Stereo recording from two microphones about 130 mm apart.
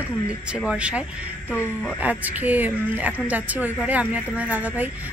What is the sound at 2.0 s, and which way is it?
A woman's voice, 10° right (ahead or behind).